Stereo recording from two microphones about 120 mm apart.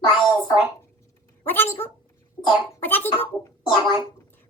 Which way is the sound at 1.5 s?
20° left (ahead or behind).